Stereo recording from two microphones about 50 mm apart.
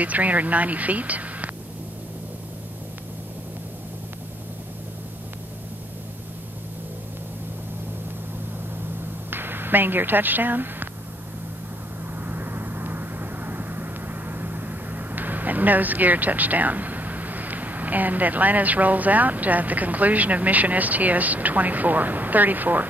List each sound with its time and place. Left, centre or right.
0.0 s speech: right
9.3 s speech: right
12.3 s vehicle: right